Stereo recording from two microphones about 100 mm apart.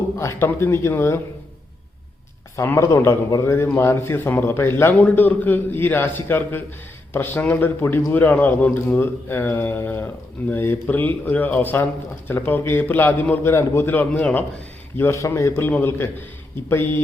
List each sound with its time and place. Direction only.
0.2 s a man's voice: 25° left (ahead or behind)
2.6 s a man's voice: 30° left (ahead or behind)
14.9 s a man's voice: 25° left (ahead or behind)